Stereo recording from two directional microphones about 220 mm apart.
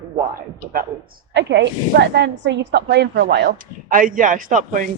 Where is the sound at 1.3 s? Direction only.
50° right (ahead or behind).